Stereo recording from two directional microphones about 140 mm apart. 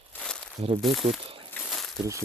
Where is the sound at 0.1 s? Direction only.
5° left (ahead or behind).